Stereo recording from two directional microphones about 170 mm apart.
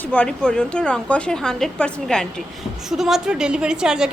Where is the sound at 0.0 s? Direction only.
10° left (ahead or behind).